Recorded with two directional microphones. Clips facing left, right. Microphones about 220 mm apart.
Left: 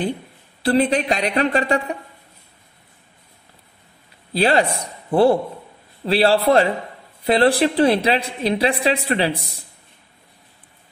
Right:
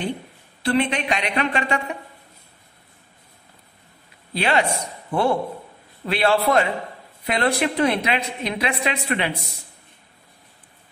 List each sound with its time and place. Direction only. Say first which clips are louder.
0.6 s a woman's voice: left 4 dB; 35° left (ahead or behind)
4.3 s a woman's voice: left 4 dB; 35° left (ahead or behind)